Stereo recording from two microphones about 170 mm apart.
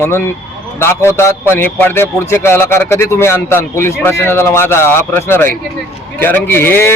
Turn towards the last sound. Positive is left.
turn(degrees=15)  # may be behind; listen again after turning